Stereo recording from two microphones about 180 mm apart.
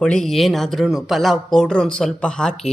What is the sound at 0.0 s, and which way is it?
Speech, 5° left (ahead or behind).